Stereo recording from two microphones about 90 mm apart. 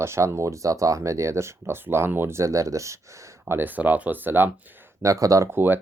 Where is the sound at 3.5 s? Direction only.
20° right (ahead or behind).